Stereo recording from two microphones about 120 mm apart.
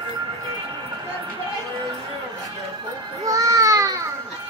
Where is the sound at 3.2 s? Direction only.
25° right (ahead or behind).